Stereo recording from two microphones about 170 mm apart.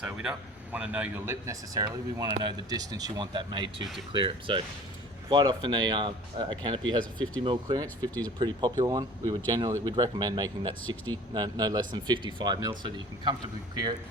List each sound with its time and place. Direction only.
0.0 s speech: 5° right (ahead or behind); by 13.3 s 25° right (ahead or behind)